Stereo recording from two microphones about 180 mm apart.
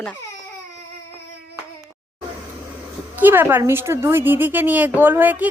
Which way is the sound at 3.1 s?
10° right (ahead or behind).